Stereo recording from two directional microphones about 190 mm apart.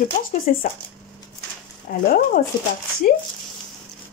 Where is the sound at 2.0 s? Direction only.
45° left (ahead or behind).